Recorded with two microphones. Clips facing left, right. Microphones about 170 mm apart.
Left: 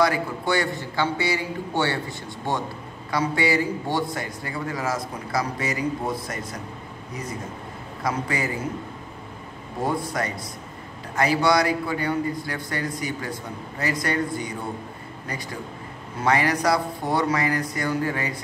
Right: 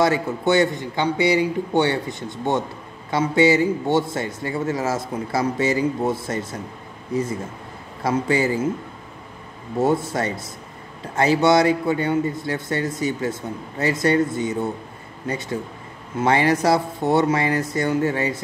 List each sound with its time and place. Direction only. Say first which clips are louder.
0.0 s a man's voice: right 3 dB; 25° right (ahead or behind)
8.0 s a man's voice: right 6 dB; 25° right (ahead or behind)
9.8 s a man's voice: right 6 dB; 25° right (ahead or behind)